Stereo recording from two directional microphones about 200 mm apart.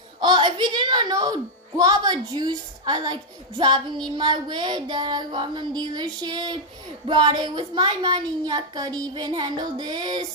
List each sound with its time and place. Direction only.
0.2 s a woman's voice: 25° right (ahead or behind)